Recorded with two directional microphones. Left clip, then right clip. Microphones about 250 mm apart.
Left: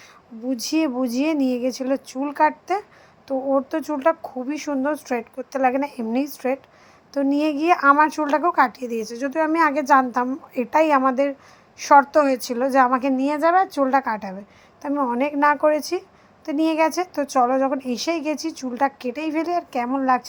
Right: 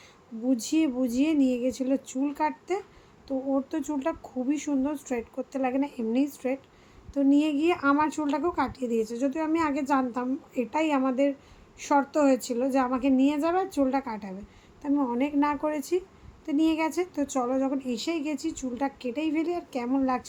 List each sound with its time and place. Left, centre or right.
0.7 s a woman's voice: centre